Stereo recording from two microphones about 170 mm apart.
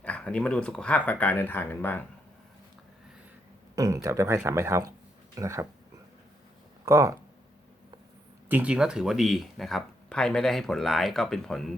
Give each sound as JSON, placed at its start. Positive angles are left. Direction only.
{"t": 0.0, "sound": "speech", "side_deg": 5}
{"t": 3.8, "sound": "speech", "side_deg": -20}
{"t": 6.8, "sound": "speech", "side_deg": -20}
{"t": 8.4, "sound": "speech", "side_deg": -10}